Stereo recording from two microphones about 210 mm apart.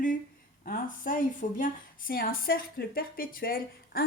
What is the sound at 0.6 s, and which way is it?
A woman's voice, 40° left (ahead or behind).